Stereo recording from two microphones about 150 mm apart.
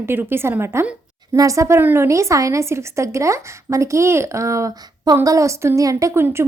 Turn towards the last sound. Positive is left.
turn(degrees=-15)  # may be behind; listen again after turning